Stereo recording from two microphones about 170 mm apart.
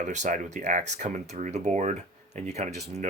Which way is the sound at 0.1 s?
45° right (ahead or behind).